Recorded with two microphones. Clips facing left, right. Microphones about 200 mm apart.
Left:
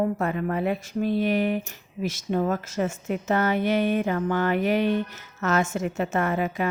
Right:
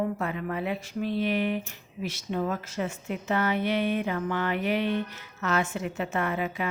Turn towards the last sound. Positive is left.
turn(degrees=45)  # may be behind; listen again after turning